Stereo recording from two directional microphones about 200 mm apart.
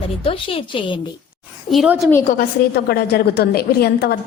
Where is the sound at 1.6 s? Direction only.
5° right (ahead or behind).